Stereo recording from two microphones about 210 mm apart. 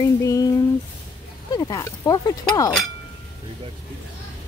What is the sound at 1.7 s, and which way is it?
Speech, 15° left (ahead or behind).